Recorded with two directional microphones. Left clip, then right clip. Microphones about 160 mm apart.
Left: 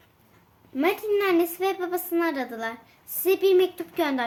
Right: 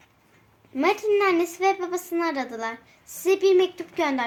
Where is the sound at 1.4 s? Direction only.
25° left (ahead or behind).